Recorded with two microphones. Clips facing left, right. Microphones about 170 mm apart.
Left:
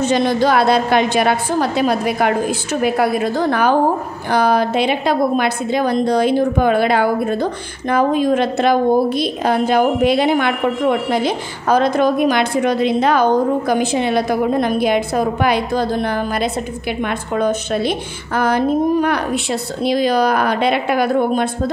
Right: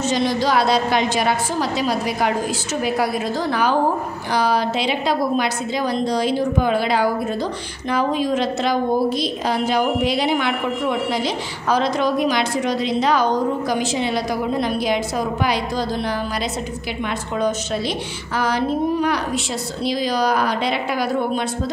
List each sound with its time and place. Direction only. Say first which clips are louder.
0.0 s a woman's voice: left 4 dB; 55° left (ahead or behind)